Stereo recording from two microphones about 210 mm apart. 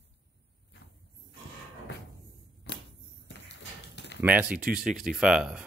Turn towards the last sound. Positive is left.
turn(degrees=-5)  # may be behind; listen again after turning